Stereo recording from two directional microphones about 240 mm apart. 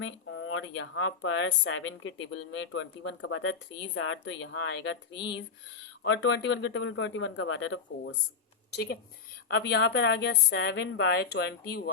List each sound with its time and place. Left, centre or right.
0.0 s speech: left
6.0 s speech: left
8.7 s a woman's voice: left